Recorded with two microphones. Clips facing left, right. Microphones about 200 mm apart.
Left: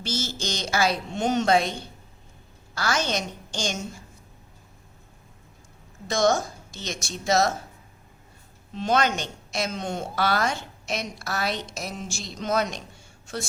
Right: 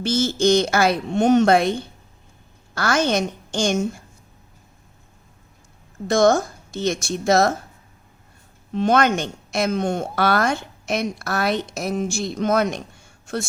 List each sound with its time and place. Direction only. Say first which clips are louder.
0.0 s a woman's voice: right 12 dB; 55° right (ahead or behind)
6.1 s a woman's voice: right 6 dB; 55° right (ahead or behind)
8.7 s a woman's voice: right 6 dB; 55° right (ahead or behind)